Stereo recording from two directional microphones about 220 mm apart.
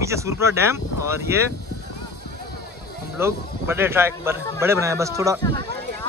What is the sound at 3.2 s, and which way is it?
Speech, 10° right (ahead or behind).